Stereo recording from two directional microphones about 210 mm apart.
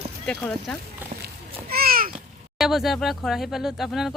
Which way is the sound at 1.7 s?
45° right (ahead or behind).